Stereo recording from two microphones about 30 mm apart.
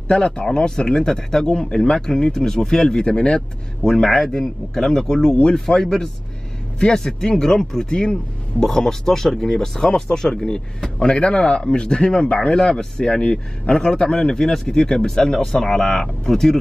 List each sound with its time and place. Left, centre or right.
0.6 s speech: left
2.3 s speech: centre
3.8 s speech: centre
5.3 s speech: left
6.9 s speech: centre
7.9 s speech: left
8.5 s speech: centre
10.3 s speech: left
14.1 s speech: centre